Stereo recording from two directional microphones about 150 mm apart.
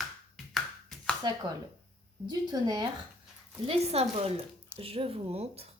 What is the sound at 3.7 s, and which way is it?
Speech, 40° right (ahead or behind).